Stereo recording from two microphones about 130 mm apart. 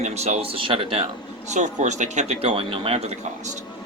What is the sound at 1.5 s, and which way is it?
Speech, 65° right (ahead or behind).